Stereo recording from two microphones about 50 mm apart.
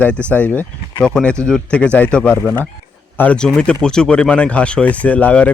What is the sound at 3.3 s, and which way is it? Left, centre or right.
Speech, centre.